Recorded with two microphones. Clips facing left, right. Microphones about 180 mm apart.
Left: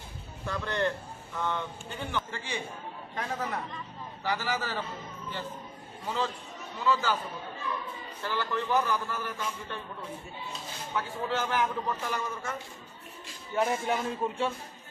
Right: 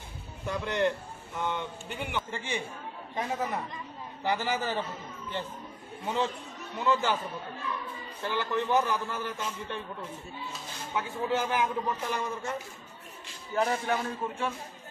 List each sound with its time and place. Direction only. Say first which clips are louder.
0.5 s speech: right 2 dB; 15° right (ahead or behind)
6.0 s speech: right 2 dB; 20° right (ahead or behind)
8.2 s speech: right 2 dB; 20° right (ahead or behind)
11.0 s speech: right 2 dB; 15° right (ahead or behind)
13.5 s speech: even; centre (ahead or behind)
13.8 s a man's voice: left 1 dB; 20° left (ahead or behind)